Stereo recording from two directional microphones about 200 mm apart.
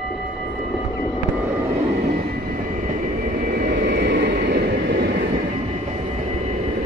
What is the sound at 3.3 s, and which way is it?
Vehicle, 50° right (ahead or behind).